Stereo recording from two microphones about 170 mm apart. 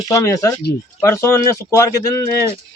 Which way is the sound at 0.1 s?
20° left (ahead or behind).